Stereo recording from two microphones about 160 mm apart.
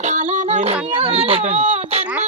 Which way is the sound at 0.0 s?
45° right (ahead or behind).